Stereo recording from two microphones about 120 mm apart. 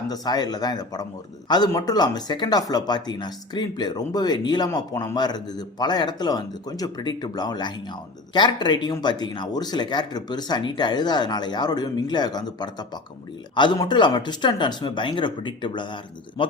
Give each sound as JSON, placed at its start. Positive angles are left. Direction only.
{"t": 0.1, "sound": "speech", "side_deg": 35}
{"t": 13.7, "sound": "speech", "side_deg": 40}